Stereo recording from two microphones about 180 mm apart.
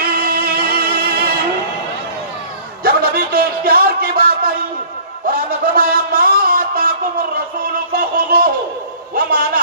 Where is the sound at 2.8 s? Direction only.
55° right (ahead or behind).